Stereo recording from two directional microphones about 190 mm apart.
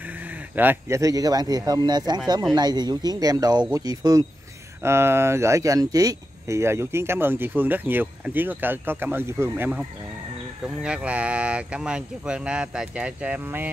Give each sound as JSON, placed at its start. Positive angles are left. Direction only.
{"t": 0.0, "sound": "speech", "side_deg": -10}